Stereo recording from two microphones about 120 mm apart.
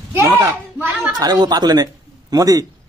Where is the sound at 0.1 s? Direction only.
20° right (ahead or behind).